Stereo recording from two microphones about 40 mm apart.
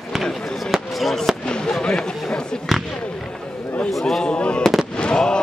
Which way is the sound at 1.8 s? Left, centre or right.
Centre.